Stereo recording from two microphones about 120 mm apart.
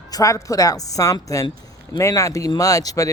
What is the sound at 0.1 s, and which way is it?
Speech, 25° left (ahead or behind).